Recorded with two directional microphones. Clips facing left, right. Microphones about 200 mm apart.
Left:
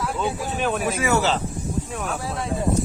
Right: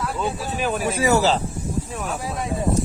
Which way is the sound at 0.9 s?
35° right (ahead or behind).